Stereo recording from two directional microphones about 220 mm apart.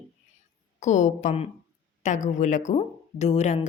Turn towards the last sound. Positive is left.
turn(degrees=30)  # may be behind; listen again after turning